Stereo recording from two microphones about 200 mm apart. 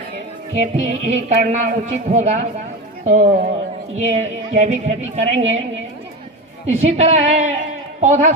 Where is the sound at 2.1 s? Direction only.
35° right (ahead or behind).